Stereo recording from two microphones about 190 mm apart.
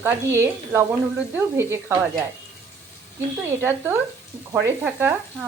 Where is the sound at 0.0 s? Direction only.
15° right (ahead or behind).